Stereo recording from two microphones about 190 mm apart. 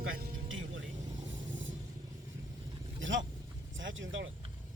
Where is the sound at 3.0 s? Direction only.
80° right.